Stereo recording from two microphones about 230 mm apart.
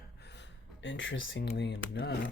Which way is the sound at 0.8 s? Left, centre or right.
Left.